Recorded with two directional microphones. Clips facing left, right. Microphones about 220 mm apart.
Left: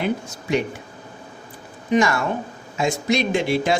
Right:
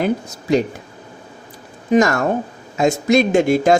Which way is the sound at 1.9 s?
40° right (ahead or behind).